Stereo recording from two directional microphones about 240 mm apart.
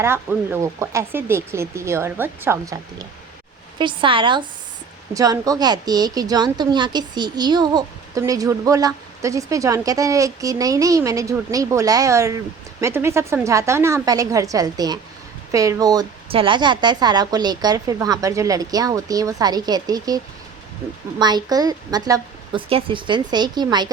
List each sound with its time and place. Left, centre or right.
0.0 s a woman's voice: centre
3.8 s a woman's voice: right